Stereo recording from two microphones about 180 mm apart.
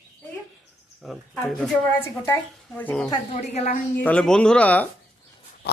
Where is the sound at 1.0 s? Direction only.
Centre (ahead or behind).